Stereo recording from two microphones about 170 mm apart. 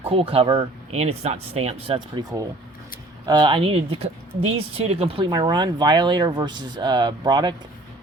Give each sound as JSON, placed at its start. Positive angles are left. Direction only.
{"t": 0.0, "sound": "speech", "side_deg": -35}